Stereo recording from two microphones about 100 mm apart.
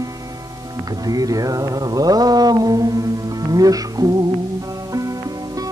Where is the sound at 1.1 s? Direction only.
40° right (ahead or behind).